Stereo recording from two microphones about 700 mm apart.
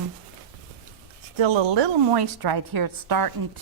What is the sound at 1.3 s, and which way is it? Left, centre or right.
A woman's voice, right.